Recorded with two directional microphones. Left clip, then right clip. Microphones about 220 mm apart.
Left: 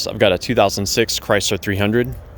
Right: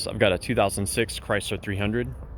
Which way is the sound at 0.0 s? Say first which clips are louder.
Left 7 dB; 20° left (ahead or behind).